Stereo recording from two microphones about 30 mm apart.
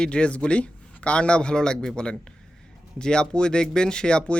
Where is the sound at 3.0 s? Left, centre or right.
Left.